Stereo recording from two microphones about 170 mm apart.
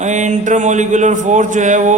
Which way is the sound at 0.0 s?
45° right (ahead or behind).